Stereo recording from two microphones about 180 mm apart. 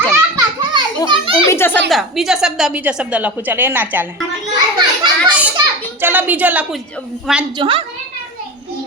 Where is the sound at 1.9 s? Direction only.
Centre (ahead or behind).